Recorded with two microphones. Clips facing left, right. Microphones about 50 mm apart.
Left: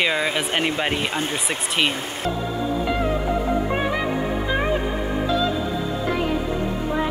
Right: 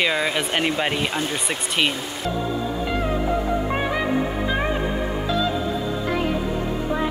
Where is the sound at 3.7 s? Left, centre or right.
Centre.